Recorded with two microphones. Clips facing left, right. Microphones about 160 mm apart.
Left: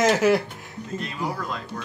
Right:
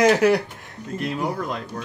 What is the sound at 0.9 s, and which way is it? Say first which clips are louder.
Speech: right 4 dB; 60° right (ahead or behind).